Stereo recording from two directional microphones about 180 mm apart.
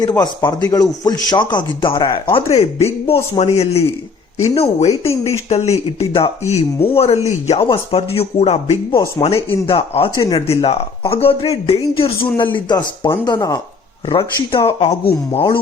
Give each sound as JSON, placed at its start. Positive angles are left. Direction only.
{"t": 0.2, "sound": "speech", "side_deg": 20}
{"t": 2.6, "sound": "speech", "side_deg": 35}
{"t": 10.4, "sound": "speech", "side_deg": 35}